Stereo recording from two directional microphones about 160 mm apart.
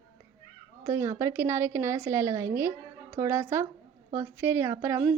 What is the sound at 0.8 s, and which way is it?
A woman's voice, 15° right (ahead or behind).